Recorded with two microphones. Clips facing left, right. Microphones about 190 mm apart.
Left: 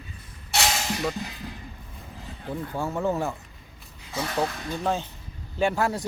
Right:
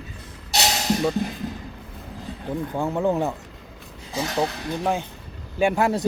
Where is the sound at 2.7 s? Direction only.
15° right (ahead or behind).